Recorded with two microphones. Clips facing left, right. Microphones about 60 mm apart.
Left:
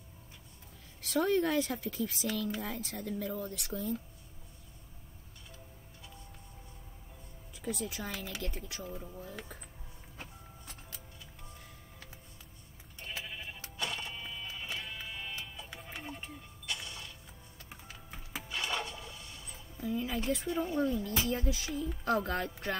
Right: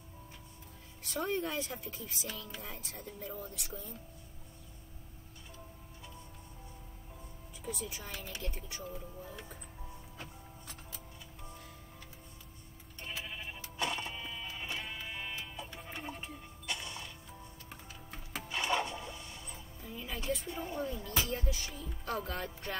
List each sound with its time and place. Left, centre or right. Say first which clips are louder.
1.0 s speech: left 6 dB; left
7.6 s speech: left 5 dB; left
13.0 s sheep: even; centre
15.9 s music: even; centre
16.8 s music: right 1 dB; centre
17.6 s music: left 3 dB; centre
18.5 s music: right 3 dB; centre
19.0 s a sound: right 2 dB; centre
19.8 s music: left 9 dB; left
20.2 s speech: right 1 dB; left
20.5 s speech: left 7 dB; centre
21.3 s speech: left 4 dB; left